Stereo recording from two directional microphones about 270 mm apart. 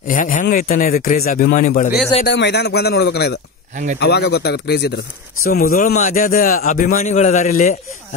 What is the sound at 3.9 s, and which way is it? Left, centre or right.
A man's voice, left.